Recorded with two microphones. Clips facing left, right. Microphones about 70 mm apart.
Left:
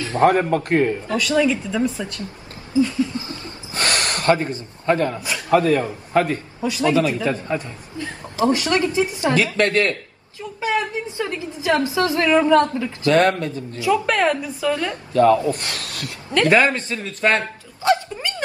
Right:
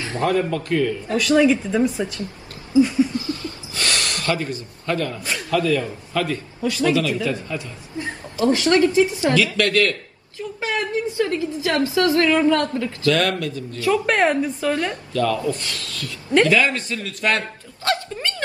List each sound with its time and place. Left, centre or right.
0.2 s a man's voice: left
1.3 s speech: centre
2.7 s a sound: centre
3.2 s gasp: left
5.5 s a man's voice: left
6.6 s a man's voice: left
13.7 s a woman's voice: centre
14.0 s a woman's voice: centre
14.7 s speech: right
15.1 s a man's voice: left
18.3 s speech: centre